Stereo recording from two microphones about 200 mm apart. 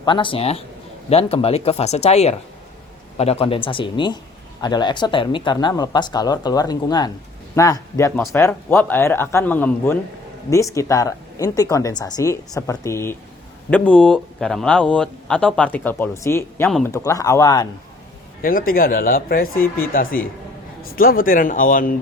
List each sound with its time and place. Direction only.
0.0 s a woman's voice: 25° left (ahead or behind)
18.4 s speech: 45° left (ahead or behind)
19.5 s a woman's voice: 10° left (ahead or behind)
19.9 s speech: 45° left (ahead or behind)